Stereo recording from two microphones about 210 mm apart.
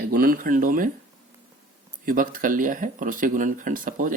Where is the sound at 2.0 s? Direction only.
40° right (ahead or behind).